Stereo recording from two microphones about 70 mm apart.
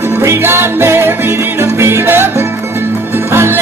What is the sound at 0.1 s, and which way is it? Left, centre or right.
Music, right.